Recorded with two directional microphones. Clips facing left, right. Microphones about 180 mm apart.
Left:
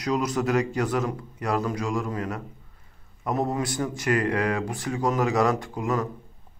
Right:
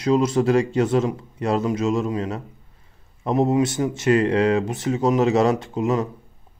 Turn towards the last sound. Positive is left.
turn(degrees=-25)  # may be behind; listen again after turning